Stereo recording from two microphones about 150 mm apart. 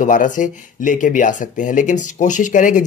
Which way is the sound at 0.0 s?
60° left (ahead or behind).